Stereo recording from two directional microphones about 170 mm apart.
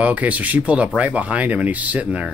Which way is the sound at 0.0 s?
10° right (ahead or behind).